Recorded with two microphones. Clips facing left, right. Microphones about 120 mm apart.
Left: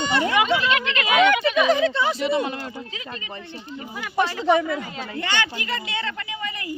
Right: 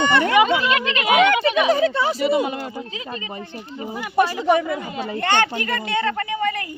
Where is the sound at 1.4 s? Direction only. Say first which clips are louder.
Right 2 dB; 30° right (ahead or behind).